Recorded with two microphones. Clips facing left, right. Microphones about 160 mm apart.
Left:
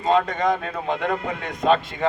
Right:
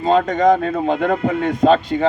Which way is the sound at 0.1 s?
40° right (ahead or behind).